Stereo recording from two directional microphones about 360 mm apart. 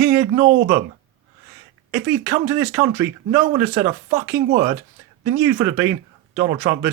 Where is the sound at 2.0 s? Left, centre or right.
Centre.